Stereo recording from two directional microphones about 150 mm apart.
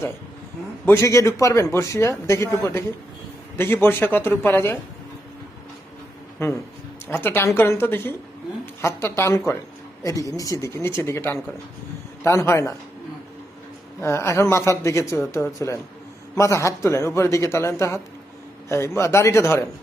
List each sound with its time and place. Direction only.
0.9 s speech: 20° left (ahead or behind)
3.6 s a man's voice: 15° left (ahead or behind)
6.4 s a man's voice: 15° left (ahead or behind)
14.0 s a man's voice: 15° left (ahead or behind)